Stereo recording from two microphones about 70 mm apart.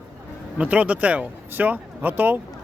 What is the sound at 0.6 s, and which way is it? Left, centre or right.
Speech, right.